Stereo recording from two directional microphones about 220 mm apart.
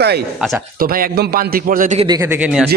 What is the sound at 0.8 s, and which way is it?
A man's voice, 40° right (ahead or behind).